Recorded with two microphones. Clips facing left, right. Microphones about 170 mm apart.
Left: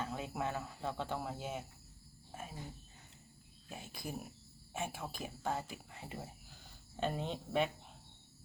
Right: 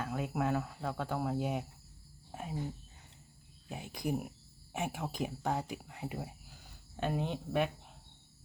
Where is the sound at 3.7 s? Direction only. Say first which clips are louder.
Right 9 dB; 15° right (ahead or behind).